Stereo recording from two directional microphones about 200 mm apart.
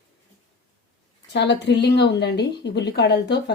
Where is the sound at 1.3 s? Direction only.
60° left (ahead or behind).